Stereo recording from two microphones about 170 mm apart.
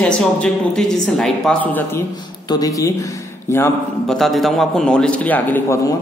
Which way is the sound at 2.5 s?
20° left (ahead or behind).